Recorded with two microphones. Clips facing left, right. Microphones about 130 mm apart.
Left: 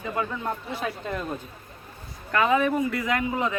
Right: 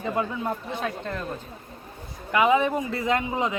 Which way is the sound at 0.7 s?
5° left (ahead or behind).